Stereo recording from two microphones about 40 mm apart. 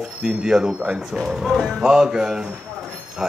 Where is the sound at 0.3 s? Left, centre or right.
Centre.